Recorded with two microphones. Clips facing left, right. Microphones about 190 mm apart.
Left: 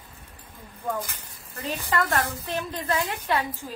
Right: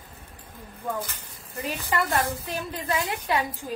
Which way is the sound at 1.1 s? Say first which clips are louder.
Right 4 dB; 10° right (ahead or behind).